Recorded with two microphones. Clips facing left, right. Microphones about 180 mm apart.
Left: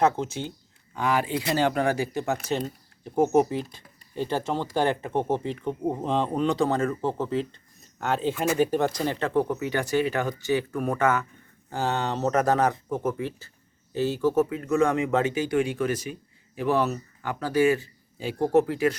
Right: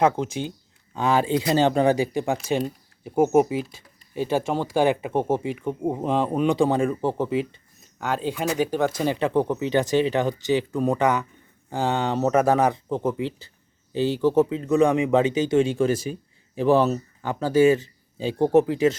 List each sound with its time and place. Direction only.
0.0 s speech: 15° right (ahead or behind)
0.9 s speech: 25° right (ahead or behind)
7.9 s speech: centre (ahead or behind)
9.0 s speech: 15° right (ahead or behind)